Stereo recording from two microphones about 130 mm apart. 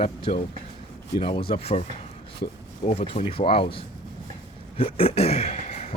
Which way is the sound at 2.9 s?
55° left (ahead or behind).